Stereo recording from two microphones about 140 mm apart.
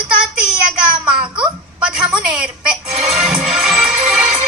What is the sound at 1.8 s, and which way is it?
Speech, 5° right (ahead or behind).